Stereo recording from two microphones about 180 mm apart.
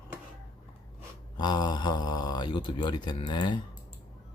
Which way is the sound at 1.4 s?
25° left (ahead or behind).